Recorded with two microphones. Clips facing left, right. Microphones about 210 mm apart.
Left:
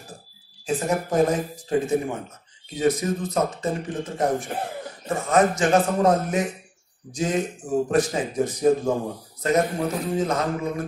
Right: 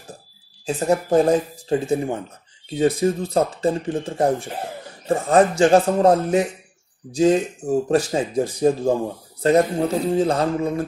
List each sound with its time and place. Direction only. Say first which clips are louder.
0.7 s speech: right 4 dB; 30° right (ahead or behind)
7.9 s speech: right 3 dB; 30° right (ahead or behind)